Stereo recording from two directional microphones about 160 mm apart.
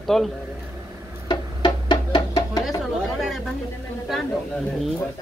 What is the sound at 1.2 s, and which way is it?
Music, 25° left (ahead or behind).